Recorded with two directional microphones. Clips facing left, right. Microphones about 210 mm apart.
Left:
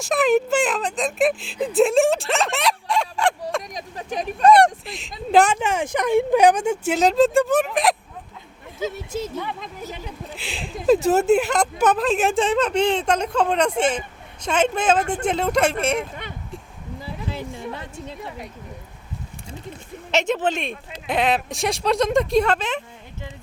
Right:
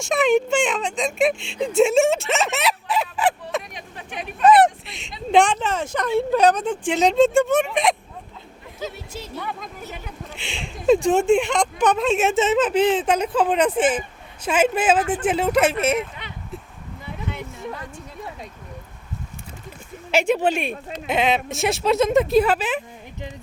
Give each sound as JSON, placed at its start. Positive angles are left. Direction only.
{"t": 0.0, "sound": "speech", "side_deg": 0}
{"t": 3.8, "sound": "speech", "side_deg": 40}
{"t": 4.4, "sound": "speech", "side_deg": -5}
{"t": 9.4, "sound": "speech", "side_deg": 20}
{"t": 10.3, "sound": "speech", "side_deg": 0}
{"t": 17.2, "sound": "speech", "side_deg": 30}
{"t": 20.1, "sound": "speech", "side_deg": -10}